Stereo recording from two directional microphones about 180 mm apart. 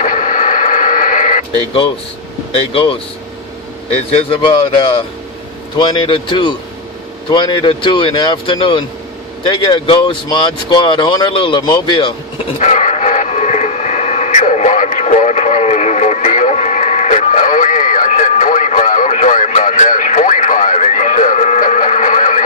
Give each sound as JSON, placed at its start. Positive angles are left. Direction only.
{"t": 0.0, "sound": "radio", "side_deg": 45}
{"t": 2.7, "sound": "speech", "side_deg": 30}
{"t": 4.1, "sound": "speech", "side_deg": 30}
{"t": 12.5, "sound": "radio", "side_deg": 40}